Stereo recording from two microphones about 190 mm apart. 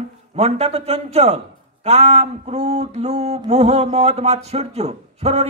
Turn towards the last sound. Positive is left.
turn(degrees=-35)  # may be behind; listen again after turning